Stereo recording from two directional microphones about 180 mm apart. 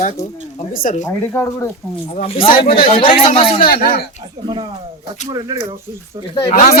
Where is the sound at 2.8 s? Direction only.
30° left (ahead or behind).